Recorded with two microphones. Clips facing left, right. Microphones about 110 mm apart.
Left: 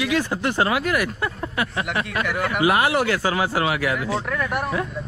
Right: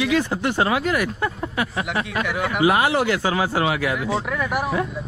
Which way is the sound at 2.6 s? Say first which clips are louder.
Right 1 dB; 25° right (ahead or behind).